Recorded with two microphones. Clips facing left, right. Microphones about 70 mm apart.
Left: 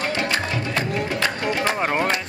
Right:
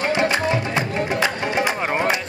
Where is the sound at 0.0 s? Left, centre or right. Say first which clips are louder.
Right 4 dB; right.